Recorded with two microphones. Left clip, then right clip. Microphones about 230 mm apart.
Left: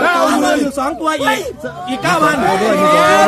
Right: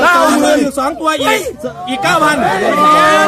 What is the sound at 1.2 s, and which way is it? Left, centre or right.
Speech, right.